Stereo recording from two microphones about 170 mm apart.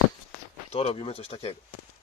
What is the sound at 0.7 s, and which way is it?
Speech, 35° left (ahead or behind).